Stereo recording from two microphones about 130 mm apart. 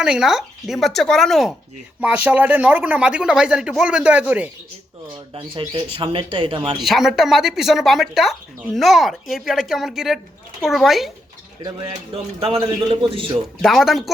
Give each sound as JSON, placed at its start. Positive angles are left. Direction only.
{"t": 0.0, "sound": "speech", "side_deg": -5}
{"t": 2.0, "sound": "speech", "side_deg": -10}
{"t": 5.3, "sound": "a man's voice", "side_deg": -40}
{"t": 6.8, "sound": "speech", "side_deg": 0}
{"t": 11.6, "sound": "a man's voice", "side_deg": -45}
{"t": 13.6, "sound": "speech", "side_deg": 0}